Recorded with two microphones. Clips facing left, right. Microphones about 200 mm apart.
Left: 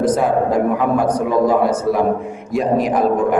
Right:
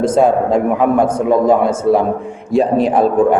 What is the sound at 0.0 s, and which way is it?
A man's voice, 25° right (ahead or behind).